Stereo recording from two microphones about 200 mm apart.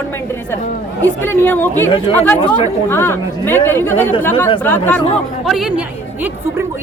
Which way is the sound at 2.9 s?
10° left (ahead or behind).